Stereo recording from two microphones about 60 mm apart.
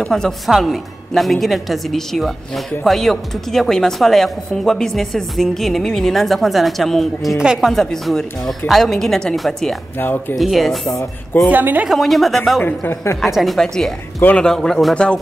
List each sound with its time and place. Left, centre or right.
0.1 s a man's voice: centre
0.5 s a woman's voice: centre
7.3 s a woman's voice: centre
7.7 s a woman's voice: centre
9.9 s speech: left
10.3 s a woman's voice: centre
10.9 s speech: left
11.5 s speech: right
11.9 s a woman's voice: centre